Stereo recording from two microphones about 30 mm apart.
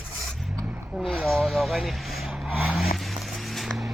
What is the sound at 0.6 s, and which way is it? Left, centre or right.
Vehicle, right.